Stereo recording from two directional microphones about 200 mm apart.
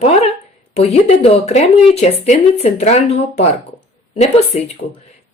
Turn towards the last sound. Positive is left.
turn(degrees=30)  # may be behind; listen again after turning